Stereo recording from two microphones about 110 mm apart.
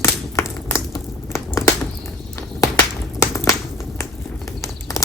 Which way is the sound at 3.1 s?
30° left (ahead or behind).